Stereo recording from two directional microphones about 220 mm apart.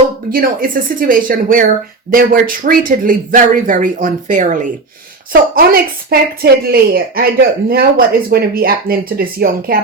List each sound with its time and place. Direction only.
0.3 s a woman's voice: 40° right (ahead or behind)